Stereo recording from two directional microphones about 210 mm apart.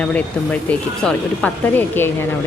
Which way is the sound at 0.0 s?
5° left (ahead or behind).